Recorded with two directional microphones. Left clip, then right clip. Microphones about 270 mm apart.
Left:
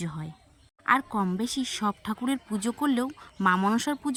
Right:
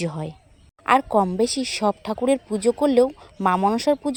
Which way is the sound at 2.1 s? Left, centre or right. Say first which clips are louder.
Right 10 dB; right.